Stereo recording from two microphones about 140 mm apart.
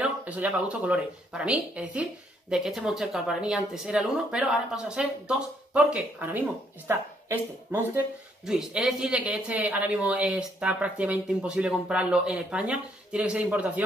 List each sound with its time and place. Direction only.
0.0 s speech: 10° right (ahead or behind)
8.5 s speech: 5° right (ahead or behind)